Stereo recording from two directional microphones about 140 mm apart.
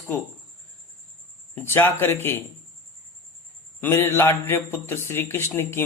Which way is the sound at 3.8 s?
15° left (ahead or behind).